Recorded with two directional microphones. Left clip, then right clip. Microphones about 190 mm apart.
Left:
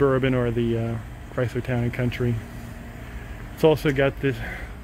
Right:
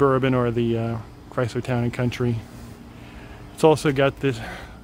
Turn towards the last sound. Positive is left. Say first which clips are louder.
# right 1 dB
turn(degrees=-15)  # may be behind; listen again after turning